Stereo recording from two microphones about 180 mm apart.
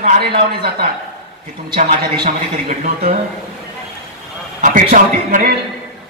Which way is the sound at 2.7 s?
50° right (ahead or behind).